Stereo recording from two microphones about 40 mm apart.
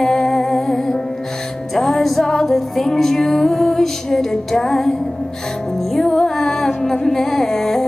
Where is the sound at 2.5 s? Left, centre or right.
Centre.